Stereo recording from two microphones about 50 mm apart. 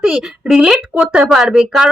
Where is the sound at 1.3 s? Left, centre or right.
Centre.